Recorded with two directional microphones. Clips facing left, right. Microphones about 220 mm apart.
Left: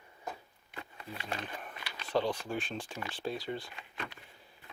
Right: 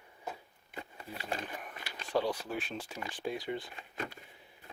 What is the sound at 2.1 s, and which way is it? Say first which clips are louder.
Speech: left 1 dB; 10° right (ahead or behind).